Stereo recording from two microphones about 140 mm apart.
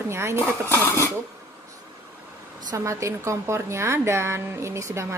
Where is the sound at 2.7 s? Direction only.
20° right (ahead or behind).